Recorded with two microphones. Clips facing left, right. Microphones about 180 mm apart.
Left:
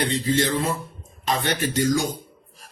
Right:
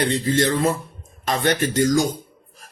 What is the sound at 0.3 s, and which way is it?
Speech, 50° right (ahead or behind).